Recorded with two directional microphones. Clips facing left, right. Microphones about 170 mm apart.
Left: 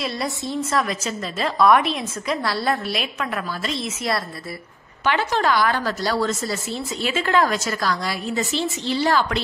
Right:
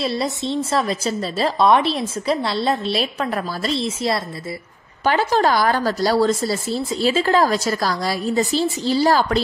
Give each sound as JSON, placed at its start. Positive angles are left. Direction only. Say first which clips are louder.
{"t": 0.0, "sound": "a woman's voice", "louder": "right 4 dB", "side_deg": -25}
{"t": 3.0, "sound": "speech", "louder": "right 4 dB", "side_deg": -35}